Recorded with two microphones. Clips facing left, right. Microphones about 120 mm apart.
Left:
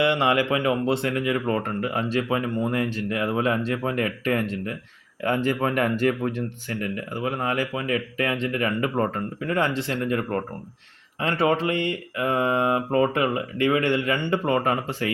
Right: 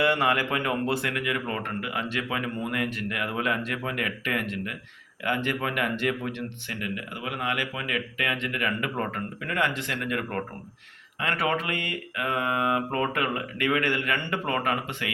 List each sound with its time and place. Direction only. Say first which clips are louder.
0.0 s speech: left 3 dB; 25° left (ahead or behind)
11.2 s mantra: left 5 dB; 30° left (ahead or behind)